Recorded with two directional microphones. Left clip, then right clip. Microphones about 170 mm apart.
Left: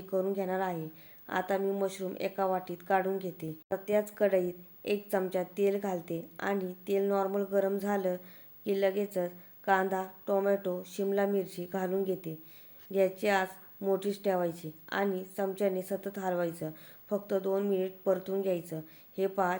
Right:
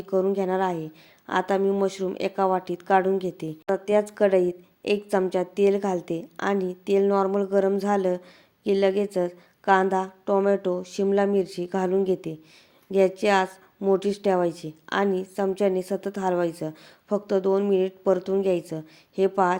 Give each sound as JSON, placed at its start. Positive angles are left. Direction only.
{"t": 0.1, "sound": "speech", "side_deg": -30}